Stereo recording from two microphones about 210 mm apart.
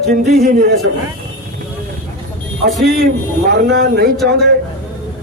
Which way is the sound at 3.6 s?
50° right (ahead or behind).